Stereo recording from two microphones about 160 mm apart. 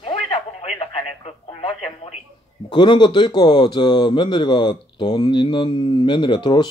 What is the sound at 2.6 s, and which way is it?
Speech, 30° left (ahead or behind).